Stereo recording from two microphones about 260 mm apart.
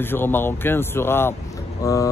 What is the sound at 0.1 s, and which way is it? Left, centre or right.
Speech, centre.